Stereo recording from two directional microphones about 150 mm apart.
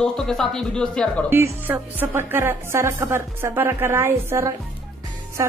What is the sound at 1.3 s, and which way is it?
A woman's voice, 15° right (ahead or behind).